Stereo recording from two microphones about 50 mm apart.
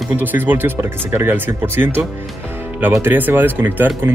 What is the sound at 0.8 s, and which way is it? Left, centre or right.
Speech, right.